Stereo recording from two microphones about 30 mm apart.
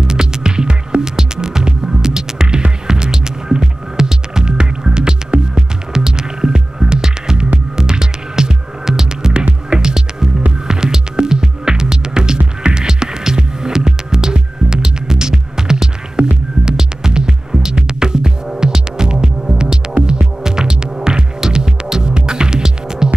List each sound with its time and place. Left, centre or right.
0.0 s music: right
9.3 s music: right
12.8 s music: right